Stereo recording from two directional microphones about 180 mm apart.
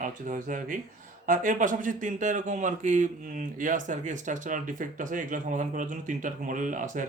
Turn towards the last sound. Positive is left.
turn(degrees=-45)  # may be behind; listen again after turning